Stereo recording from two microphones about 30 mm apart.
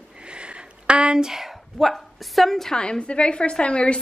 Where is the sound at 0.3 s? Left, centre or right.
Right.